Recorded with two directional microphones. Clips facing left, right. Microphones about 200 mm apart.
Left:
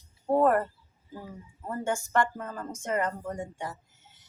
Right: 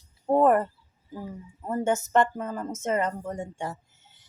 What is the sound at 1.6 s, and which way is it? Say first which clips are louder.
Speech: right 5 dB; 20° right (ahead or behind).